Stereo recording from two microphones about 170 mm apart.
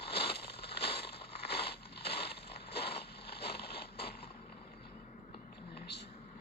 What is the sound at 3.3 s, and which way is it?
Boat, 70° left (ahead or behind).